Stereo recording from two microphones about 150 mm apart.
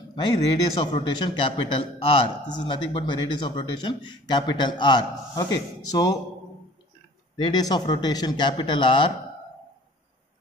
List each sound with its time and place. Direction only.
0.7 s a man's voice: 35° left (ahead or behind)
7.3 s a man's voice: 30° left (ahead or behind)